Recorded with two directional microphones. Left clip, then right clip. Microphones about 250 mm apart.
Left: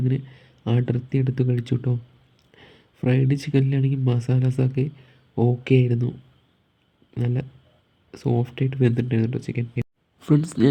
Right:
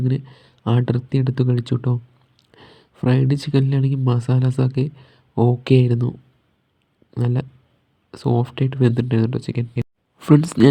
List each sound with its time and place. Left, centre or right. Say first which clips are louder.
0.0 s speech: right 2 dB; centre